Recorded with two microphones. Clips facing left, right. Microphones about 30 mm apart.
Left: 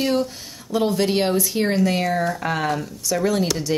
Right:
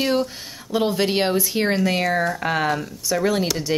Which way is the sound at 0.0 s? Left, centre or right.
Centre.